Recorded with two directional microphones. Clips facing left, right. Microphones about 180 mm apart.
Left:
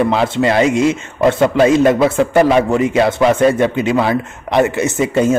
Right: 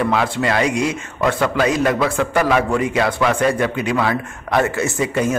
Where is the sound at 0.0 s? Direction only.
25° left (ahead or behind).